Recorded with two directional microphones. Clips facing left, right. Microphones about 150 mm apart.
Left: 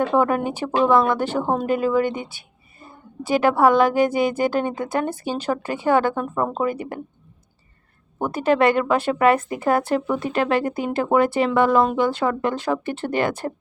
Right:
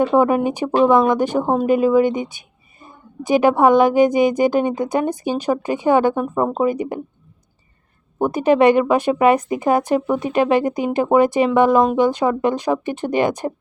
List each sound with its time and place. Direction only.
0.0 s a woman's voice: 15° right (ahead or behind)
8.2 s a woman's voice: 15° right (ahead or behind)